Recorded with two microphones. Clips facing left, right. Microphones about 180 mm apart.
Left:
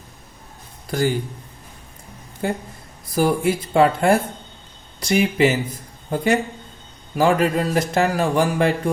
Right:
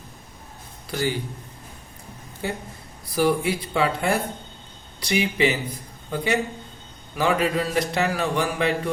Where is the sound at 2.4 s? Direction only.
50° left (ahead or behind).